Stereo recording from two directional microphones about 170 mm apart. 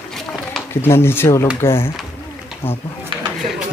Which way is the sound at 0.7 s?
15° left (ahead or behind).